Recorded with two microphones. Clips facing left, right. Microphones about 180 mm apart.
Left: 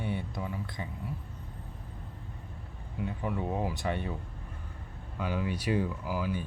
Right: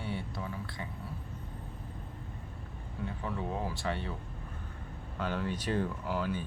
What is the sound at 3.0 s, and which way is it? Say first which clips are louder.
Speech: left 3 dB; 15° left (ahead or behind).